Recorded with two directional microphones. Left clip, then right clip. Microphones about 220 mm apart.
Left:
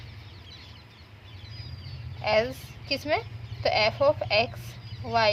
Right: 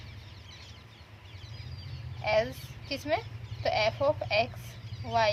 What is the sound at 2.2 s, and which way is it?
A woman's voice, 40° left (ahead or behind).